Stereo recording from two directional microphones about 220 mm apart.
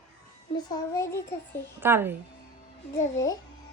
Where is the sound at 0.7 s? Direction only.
15° left (ahead or behind).